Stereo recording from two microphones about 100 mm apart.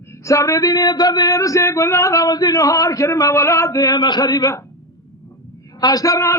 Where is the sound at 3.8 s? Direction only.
45° left (ahead or behind).